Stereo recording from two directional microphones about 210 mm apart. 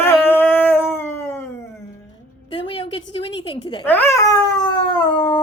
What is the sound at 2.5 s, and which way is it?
A woman's voice, 25° left (ahead or behind).